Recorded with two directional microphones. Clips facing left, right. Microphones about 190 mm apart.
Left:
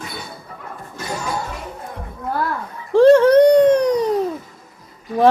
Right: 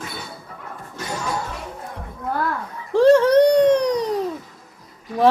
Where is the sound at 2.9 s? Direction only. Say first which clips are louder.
Left 3 dB; 55° left (ahead or behind).